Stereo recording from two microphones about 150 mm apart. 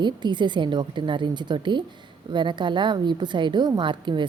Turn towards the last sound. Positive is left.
turn(degrees=-30)  # may be behind; listen again after turning